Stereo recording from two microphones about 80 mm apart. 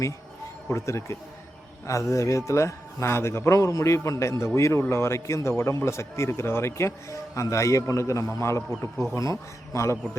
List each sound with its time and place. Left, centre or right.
0.7 s a man's voice: left